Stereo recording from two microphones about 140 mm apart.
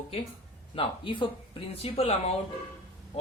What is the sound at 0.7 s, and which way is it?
Speech, 40° left (ahead or behind).